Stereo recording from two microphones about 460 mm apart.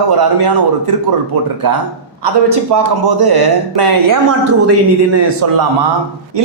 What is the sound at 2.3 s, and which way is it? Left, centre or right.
Speech, right.